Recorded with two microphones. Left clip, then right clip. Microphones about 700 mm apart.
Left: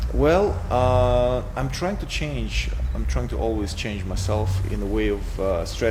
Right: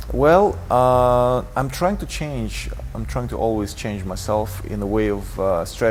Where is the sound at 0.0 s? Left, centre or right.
Right.